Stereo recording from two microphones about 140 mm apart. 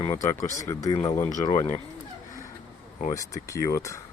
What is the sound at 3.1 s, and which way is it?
Speech, 25° left (ahead or behind).